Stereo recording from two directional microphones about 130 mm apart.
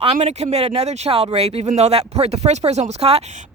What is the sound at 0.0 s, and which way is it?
A woman's voice, 55° right (ahead or behind).